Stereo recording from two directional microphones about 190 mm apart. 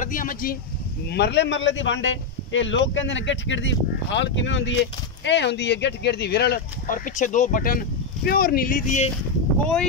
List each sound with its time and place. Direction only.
0.0 s a sound: 45° left (ahead or behind)
1.0 s speech: 60° left (ahead or behind)
7.1 s speech: 40° left (ahead or behind)